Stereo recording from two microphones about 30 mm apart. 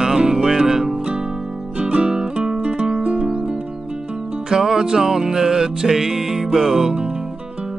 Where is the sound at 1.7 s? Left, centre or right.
Right.